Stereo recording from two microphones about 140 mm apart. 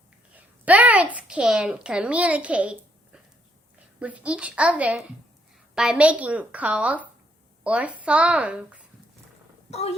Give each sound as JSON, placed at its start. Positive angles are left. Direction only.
{"t": 0.3, "sound": "a sound", "side_deg": -10}
{"t": 1.1, "sound": "a woman's voice", "side_deg": -5}
{"t": 9.6, "sound": "speech", "side_deg": 50}